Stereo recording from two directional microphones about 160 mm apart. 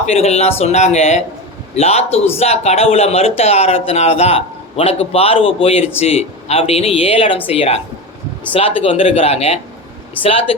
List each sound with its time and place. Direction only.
0.0 s speech: 40° left (ahead or behind)